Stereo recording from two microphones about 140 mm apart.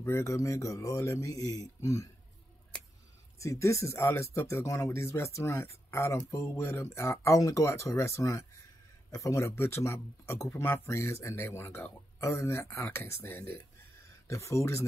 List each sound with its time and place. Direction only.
0.0 s speech: 20° left (ahead or behind)
3.3 s speech: 20° left (ahead or behind)